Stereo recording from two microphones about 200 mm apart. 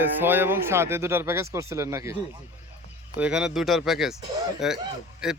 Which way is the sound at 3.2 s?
5° right (ahead or behind).